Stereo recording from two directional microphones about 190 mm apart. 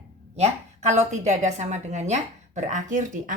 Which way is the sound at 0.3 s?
35° right (ahead or behind).